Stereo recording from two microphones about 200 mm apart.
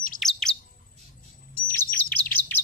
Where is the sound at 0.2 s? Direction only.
Centre (ahead or behind).